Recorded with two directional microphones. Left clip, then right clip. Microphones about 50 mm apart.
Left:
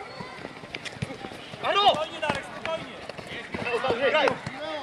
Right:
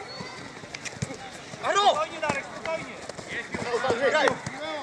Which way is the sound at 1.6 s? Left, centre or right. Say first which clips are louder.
Even; right.